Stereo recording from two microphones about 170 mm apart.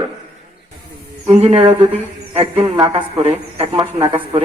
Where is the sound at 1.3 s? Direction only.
40° right (ahead or behind).